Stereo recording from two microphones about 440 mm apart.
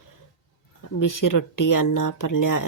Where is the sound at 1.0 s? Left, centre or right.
Left.